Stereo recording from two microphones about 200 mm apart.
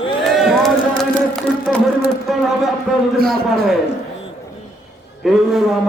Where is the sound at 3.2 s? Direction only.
50° right (ahead or behind).